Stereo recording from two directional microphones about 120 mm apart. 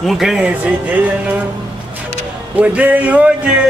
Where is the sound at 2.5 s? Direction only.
10° right (ahead or behind).